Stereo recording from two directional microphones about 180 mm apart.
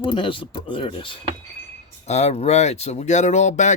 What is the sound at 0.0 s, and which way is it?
Speech, 25° left (ahead or behind).